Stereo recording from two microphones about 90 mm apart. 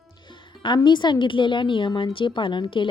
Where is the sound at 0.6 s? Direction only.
55° left (ahead or behind).